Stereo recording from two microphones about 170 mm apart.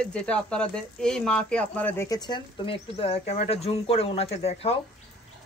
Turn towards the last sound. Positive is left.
turn(degrees=35)  # may be behind; listen again after turning